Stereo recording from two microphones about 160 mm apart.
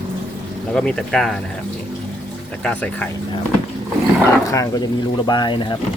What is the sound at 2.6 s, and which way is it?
Speech, 10° left (ahead or behind).